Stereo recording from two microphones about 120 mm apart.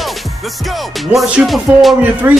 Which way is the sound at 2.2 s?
20° right (ahead or behind).